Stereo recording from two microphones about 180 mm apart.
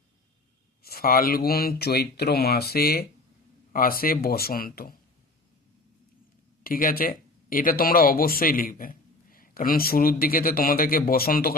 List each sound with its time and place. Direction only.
0.8 s speech: 60° left (ahead or behind)
6.6 s speech: 50° left (ahead or behind)